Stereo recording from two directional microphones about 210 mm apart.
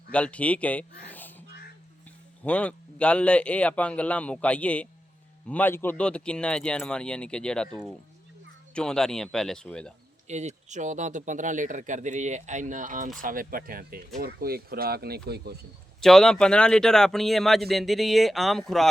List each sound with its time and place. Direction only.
0.1 s speech: 5° left (ahead or behind)
1.0 s music: 10° left (ahead or behind)
2.4 s speech: 5° left (ahead or behind)
10.2 s speech: 35° right (ahead or behind); by 15.5 s 50° right (ahead or behind)
16.0 s speech: centre (ahead or behind)